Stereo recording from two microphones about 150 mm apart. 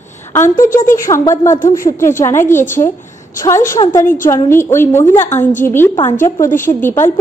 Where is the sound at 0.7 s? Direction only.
65° left (ahead or behind).